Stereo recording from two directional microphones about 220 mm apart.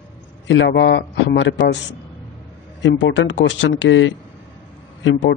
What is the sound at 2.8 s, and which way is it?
Speech, 55° left (ahead or behind).